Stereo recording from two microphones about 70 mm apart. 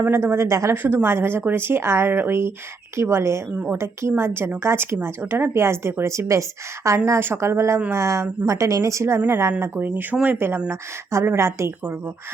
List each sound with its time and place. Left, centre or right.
0.1 s a woman's voice: right
0.8 s a woman's voice: right
9.8 s speech: right
10.7 s a woman's voice: right